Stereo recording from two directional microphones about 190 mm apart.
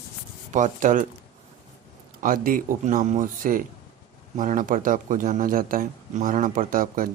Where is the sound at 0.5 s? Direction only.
40° right (ahead or behind).